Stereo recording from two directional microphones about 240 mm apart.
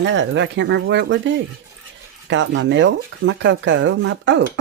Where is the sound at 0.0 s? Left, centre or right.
Right.